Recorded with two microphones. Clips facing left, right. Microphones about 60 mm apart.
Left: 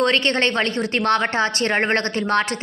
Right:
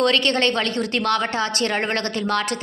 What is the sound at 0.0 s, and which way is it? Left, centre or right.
A woman's voice, left.